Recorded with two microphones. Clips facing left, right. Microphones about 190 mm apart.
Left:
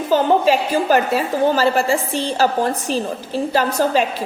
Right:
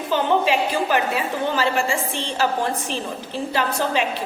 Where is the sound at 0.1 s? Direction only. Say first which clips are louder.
Left 5 dB; 40° left (ahead or behind).